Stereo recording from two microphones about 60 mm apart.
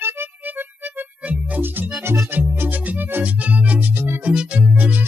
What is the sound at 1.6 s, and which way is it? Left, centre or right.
Music, right.